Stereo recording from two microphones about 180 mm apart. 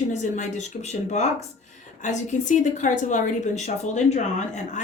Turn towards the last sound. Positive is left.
turn(degrees=40)  # may be behind; listen again after turning